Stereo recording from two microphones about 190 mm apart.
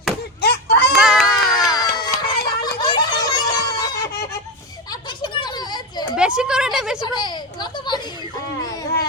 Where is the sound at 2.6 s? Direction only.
25° left (ahead or behind).